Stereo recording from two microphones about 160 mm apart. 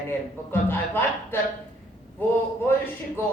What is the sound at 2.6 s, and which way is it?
Speech, 15° left (ahead or behind).